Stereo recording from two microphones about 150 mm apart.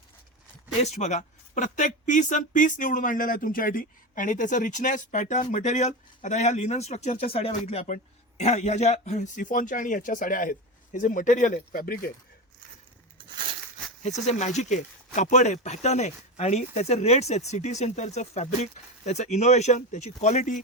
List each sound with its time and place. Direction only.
0.8 s speech: 50° left (ahead or behind); by 12.1 s 75° left (ahead or behind)
14.0 s speech: 50° left (ahead or behind)